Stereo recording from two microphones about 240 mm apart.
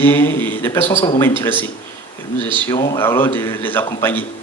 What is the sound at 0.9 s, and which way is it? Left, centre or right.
Speech, left.